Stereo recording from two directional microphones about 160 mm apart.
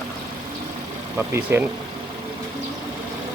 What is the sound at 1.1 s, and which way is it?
Speech, 10° right (ahead or behind).